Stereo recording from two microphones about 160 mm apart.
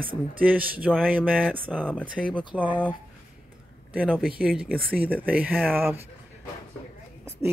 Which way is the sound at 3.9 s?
5° right (ahead or behind).